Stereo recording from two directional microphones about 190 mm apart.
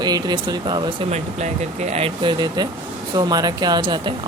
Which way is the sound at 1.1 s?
35° right (ahead or behind).